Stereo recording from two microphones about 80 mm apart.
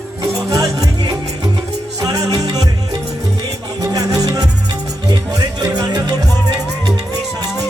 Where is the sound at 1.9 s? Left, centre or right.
Right.